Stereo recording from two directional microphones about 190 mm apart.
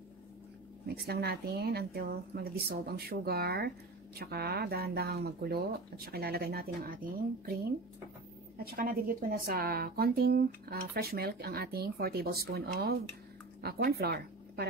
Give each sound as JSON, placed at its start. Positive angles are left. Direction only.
{"t": 0.8, "sound": "speech", "side_deg": -55}
{"t": 8.5, "sound": "speech", "side_deg": -50}